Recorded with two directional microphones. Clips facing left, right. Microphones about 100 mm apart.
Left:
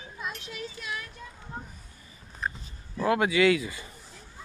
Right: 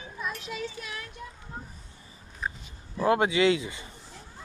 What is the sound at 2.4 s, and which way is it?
Dog, centre (ahead or behind).